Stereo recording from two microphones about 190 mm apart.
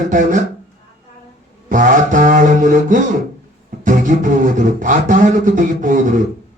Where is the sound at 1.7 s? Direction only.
45° right (ahead or behind).